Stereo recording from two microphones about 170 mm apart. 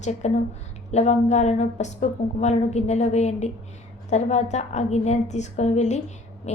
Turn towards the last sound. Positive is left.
turn(degrees=40)  # may be behind; listen again after turning